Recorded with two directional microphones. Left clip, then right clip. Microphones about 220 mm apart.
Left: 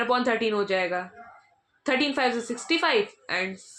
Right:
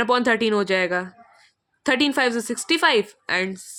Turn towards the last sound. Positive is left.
turn(degrees=-50)  # may be behind; listen again after turning